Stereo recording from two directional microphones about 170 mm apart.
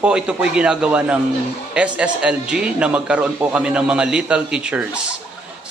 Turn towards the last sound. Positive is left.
turn(degrees=-5)  # may be behind; listen again after turning